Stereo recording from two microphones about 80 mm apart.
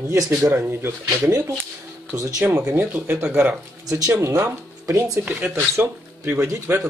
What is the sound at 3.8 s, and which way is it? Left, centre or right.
Speech, right.